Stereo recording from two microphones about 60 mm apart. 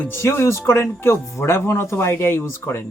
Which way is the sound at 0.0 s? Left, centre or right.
Left.